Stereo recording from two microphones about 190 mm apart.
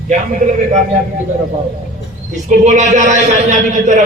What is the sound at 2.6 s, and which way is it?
A man's voice, 35° right (ahead or behind).